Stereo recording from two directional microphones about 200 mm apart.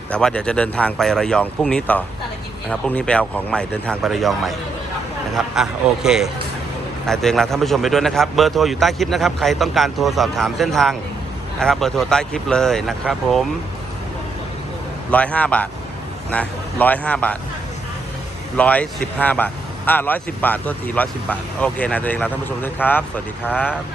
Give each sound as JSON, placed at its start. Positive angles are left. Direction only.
{"t": 0.1, "sound": "a man's voice", "side_deg": 5}
{"t": 15.1, "sound": "speech", "side_deg": 5}
{"t": 18.5, "sound": "speech", "side_deg": 5}